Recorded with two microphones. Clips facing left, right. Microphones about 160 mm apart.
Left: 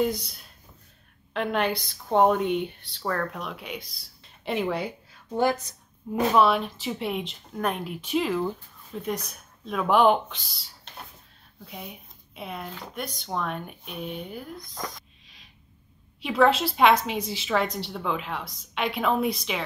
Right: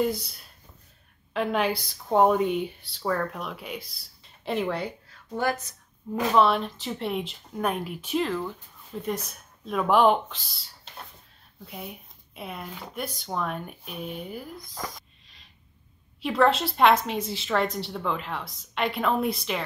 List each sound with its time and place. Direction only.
0.0 s a woman's voice: 5° right (ahead or behind)
5.3 s a woman's voice: 20° left (ahead or behind)
6.3 s a woman's voice: 5° left (ahead or behind)